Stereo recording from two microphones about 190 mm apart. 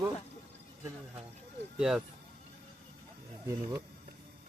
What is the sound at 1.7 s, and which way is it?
Speech, 5° right (ahead or behind).